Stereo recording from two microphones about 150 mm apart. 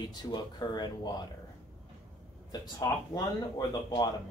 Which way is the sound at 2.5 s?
25° left (ahead or behind).